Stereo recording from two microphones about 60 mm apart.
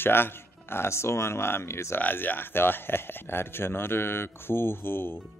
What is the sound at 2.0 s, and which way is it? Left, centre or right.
Speech, left.